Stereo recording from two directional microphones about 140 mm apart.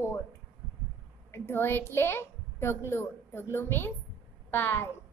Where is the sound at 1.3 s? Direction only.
15° left (ahead or behind).